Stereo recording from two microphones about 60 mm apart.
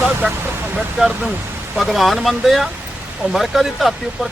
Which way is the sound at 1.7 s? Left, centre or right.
Centre.